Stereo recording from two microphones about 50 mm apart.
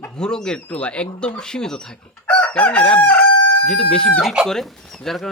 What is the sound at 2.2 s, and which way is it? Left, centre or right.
Chicken, left.